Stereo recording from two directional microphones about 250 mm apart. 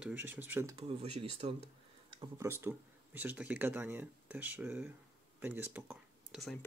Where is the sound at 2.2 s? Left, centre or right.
Centre.